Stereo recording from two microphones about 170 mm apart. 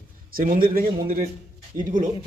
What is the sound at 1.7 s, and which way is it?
Speech, 15° right (ahead or behind).